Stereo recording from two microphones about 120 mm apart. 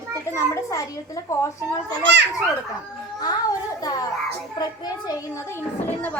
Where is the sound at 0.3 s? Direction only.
25° left (ahead or behind).